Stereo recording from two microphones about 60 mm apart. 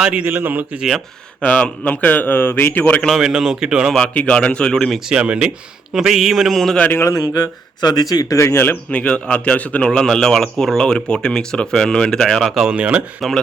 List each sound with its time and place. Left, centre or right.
0.1 s a man's voice: right
0.8 s mantra: centre
1.4 s speech: centre
3.2 s speech: centre
4.0 s speech: left
5.0 s speech: centre
5.9 s mantra: centre
7.1 s speech: left
8.5 s speech: left
8.9 s a man's voice: left
12.7 s a man's voice: right